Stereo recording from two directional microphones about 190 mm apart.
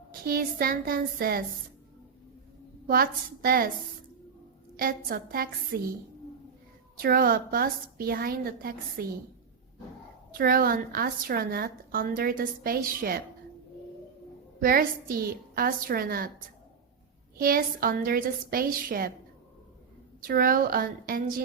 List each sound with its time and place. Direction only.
0.1 s a woman's voice: 50° right (ahead or behind)
2.8 s a woman's voice: 50° right (ahead or behind)
4.8 s a woman's voice: 50° right (ahead or behind)
7.0 s a woman's voice: 50° right (ahead or behind)
10.3 s a woman's voice: 50° right (ahead or behind)
14.6 s a woman's voice: 50° right (ahead or behind)
17.3 s a woman's voice: 50° right (ahead or behind)
20.2 s a woman's voice: 50° right (ahead or behind)